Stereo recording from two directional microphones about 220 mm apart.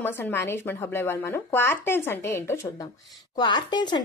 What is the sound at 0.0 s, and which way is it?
A woman's voice, 10° left (ahead or behind).